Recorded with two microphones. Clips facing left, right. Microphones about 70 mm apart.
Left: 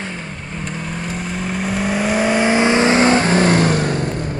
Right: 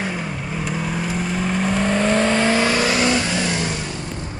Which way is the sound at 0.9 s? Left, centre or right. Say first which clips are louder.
Right 2 dB; centre.